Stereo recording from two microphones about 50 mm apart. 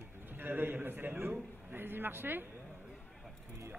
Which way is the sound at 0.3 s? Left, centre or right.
Right.